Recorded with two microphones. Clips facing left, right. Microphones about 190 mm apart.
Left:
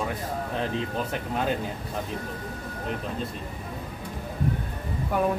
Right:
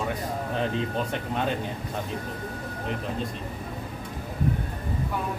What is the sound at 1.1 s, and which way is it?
Speech, 5° left (ahead or behind).